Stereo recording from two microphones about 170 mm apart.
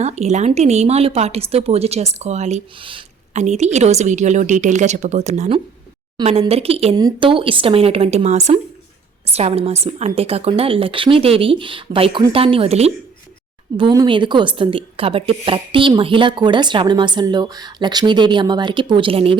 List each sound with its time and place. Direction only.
0.0 s a woman's voice: 45° right (ahead or behind)
6.1 s a woman's voice: 30° right (ahead or behind)
6.9 s a woman's voice: 25° right (ahead or behind)
13.7 s a woman's voice: 25° right (ahead or behind)